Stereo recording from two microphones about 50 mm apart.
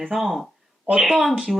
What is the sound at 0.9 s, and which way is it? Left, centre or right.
Speech, centre.